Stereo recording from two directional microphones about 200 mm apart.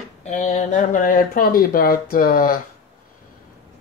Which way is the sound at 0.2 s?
40° left (ahead or behind).